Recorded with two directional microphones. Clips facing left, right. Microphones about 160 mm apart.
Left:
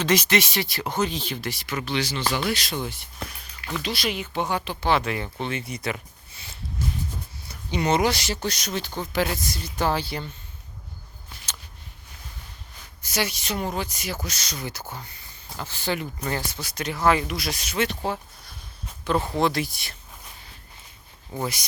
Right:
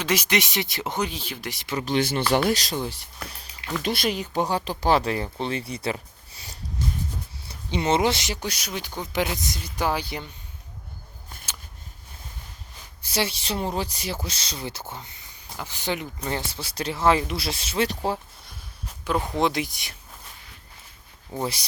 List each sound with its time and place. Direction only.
0.0 s speech: 10° right (ahead or behind)
1.8 s speech: 45° right (ahead or behind)
3.8 s speech: 50° right (ahead or behind)
7.4 s speech: 25° right (ahead or behind)
13.0 s speech: 30° right (ahead or behind)
19.0 s speech: 10° right (ahead or behind)
21.3 s speech: 30° right (ahead or behind)